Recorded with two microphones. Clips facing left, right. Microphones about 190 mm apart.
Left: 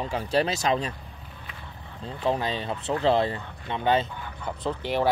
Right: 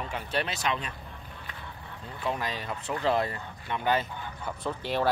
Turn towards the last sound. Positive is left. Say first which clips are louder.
# left 3 dB
turn(degrees=15)  # may be behind; listen again after turning